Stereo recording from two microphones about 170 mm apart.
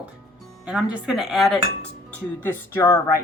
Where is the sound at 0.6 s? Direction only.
5° right (ahead or behind).